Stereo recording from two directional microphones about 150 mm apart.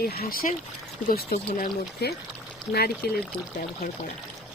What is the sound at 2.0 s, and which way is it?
Speech, 90° left.